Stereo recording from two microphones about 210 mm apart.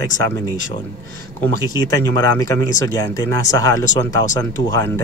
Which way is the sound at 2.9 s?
15° left (ahead or behind).